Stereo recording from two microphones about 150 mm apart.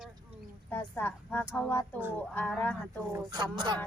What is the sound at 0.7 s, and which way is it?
Speech, 10° left (ahead or behind).